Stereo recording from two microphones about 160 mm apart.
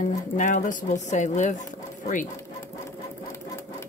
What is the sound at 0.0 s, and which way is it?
Speech, 55° left (ahead or behind).